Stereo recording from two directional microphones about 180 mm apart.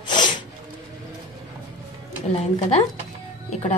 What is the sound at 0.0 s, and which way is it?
Music, 25° left (ahead or behind).